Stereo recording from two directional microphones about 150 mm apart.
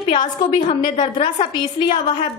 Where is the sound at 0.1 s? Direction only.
30° left (ahead or behind).